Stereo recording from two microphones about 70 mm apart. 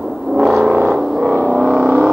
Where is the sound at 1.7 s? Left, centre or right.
Right.